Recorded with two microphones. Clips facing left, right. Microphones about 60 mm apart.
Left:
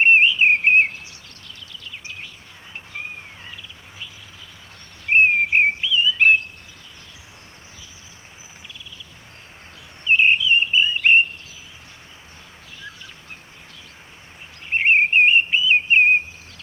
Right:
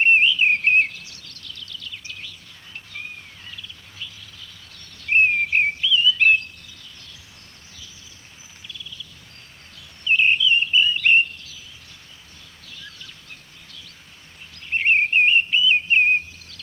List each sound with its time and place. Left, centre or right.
0.0 s bird vocalization: left
2.9 s cat: left
5.0 s chirp: left
8.6 s a sound: left
10.0 s chirp: left
14.7 s chirp: left